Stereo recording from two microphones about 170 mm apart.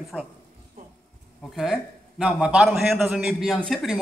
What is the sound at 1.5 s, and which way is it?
A man's voice, centre (ahead or behind).